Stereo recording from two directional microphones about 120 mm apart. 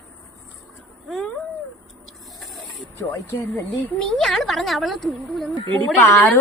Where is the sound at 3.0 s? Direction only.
20° left (ahead or behind).